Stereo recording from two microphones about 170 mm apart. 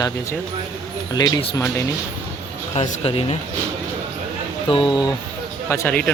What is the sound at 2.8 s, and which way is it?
Speech, 35° left (ahead or behind).